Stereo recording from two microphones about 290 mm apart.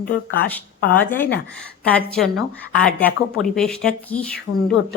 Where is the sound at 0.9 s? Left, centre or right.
Centre.